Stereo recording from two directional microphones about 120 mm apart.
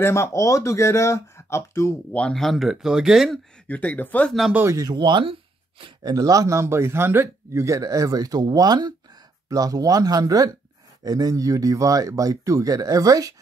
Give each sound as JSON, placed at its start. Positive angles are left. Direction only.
{"t": 0.0, "sound": "speech", "side_deg": 25}
{"t": 2.1, "sound": "speech", "side_deg": 5}
{"t": 3.6, "sound": "speech", "side_deg": 10}
{"t": 4.5, "sound": "speech", "side_deg": -15}
{"t": 4.7, "sound": "speech", "side_deg": -35}
{"t": 6.0, "sound": "a man's voice", "side_deg": -30}